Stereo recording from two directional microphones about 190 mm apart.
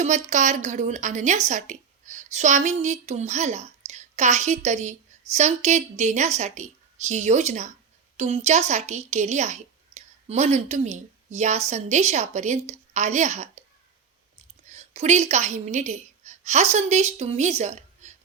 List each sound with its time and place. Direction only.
0.0 s a woman's voice: 40° right (ahead or behind)
14.7 s a woman's voice: 35° right (ahead or behind)